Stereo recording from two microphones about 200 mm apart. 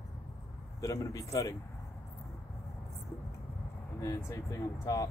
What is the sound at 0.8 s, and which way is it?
Speech, 15° left (ahead or behind).